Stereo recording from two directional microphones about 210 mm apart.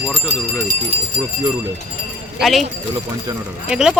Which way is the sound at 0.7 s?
30° right (ahead or behind).